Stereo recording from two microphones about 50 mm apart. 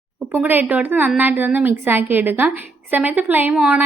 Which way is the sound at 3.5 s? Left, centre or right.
Centre.